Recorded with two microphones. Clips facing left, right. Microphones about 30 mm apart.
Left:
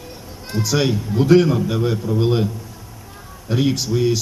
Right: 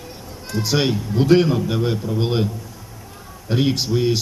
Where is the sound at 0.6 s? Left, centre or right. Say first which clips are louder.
Left 1 dB; centre.